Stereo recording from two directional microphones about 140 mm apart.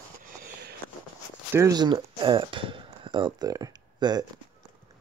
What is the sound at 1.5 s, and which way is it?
Speech, 25° right (ahead or behind).